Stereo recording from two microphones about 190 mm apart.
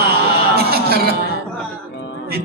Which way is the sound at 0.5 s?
55° right (ahead or behind).